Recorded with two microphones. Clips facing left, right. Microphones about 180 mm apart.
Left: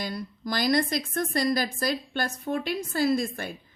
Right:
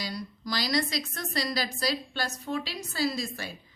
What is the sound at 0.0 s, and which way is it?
A woman's voice, 50° left (ahead or behind).